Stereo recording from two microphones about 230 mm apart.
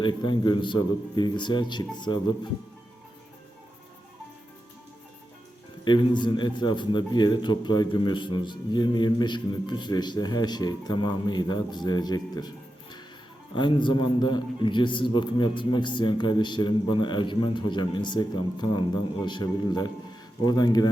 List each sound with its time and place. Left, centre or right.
0.0 s a man's voice: centre
5.8 s a man's voice: centre